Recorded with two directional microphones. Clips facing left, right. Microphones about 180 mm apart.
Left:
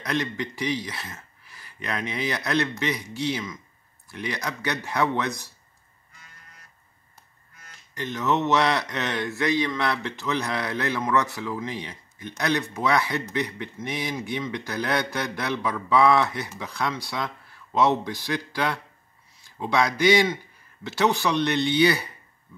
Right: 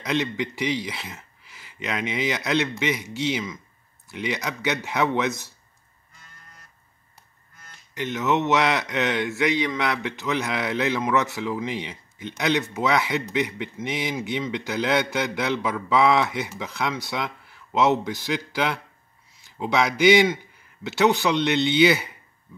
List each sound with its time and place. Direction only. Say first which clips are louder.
0.0 s a man's voice: right 2 dB; 20° right (ahead or behind)
7.9 s speech: right 2 dB; 20° right (ahead or behind)
21.3 s speech: right 2 dB; 20° right (ahead or behind)